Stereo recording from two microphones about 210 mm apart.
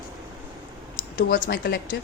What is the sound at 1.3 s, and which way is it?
Speech, 45° left (ahead or behind).